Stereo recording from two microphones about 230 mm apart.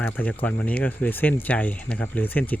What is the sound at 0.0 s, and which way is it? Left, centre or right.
Speech, centre.